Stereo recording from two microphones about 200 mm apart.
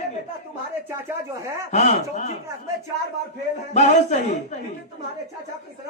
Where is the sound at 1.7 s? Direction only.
35° left (ahead or behind).